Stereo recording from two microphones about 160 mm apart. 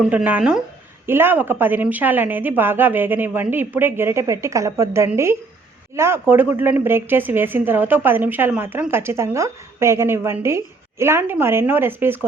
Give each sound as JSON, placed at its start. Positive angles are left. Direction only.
{"t": 0.1, "sound": "a woman's voice", "side_deg": -10}